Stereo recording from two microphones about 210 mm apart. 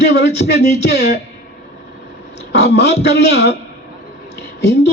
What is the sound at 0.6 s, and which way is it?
Speech, 50° left (ahead or behind).